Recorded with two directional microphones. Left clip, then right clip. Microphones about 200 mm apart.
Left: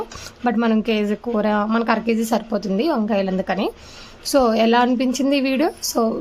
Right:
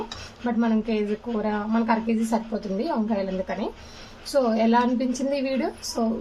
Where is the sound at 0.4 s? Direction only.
40° left (ahead or behind).